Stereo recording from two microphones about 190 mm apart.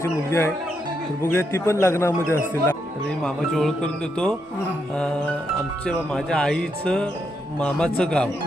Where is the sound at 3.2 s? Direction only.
5° left (ahead or behind).